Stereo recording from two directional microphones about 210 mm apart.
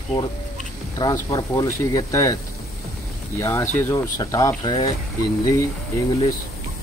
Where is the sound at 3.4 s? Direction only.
10° left (ahead or behind).